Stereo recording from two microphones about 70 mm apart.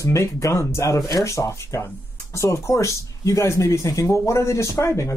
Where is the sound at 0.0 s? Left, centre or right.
Left.